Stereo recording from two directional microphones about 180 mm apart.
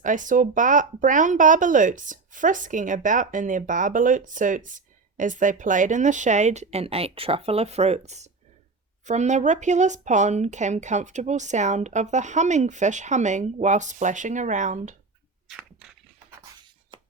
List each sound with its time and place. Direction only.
0.0 s speech: 45° right (ahead or behind)
16.9 s beatboxing: 25° right (ahead or behind)